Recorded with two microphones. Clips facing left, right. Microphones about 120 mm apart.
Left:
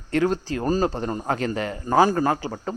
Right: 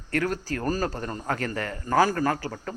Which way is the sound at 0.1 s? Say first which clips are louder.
Left 5 dB; 20° left (ahead or behind).